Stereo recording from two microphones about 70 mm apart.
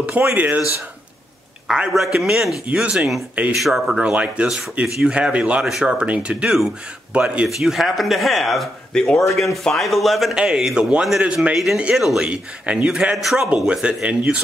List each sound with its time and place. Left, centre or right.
0.4 s speech: right
1.7 s a man's voice: centre
3.5 s speech: centre
4.1 s speech: centre
4.5 s a man's voice: centre
5.7 s a man's voice: centre
6.0 s a man's voice: centre
7.4 s speech: centre
10.3 s a man's voice: centre
13.5 s a man's voice: centre